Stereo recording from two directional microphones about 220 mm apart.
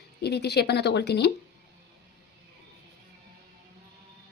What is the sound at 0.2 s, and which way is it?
A woman's voice, 45° left (ahead or behind).